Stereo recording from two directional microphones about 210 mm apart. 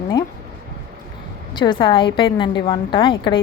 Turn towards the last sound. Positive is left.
turn(degrees=25)  # may be behind; listen again after turning